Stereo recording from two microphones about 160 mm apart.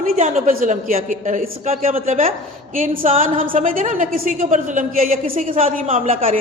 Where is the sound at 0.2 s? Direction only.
50° right (ahead or behind).